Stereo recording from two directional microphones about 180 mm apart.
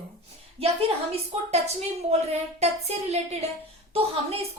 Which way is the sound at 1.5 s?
35° right (ahead or behind).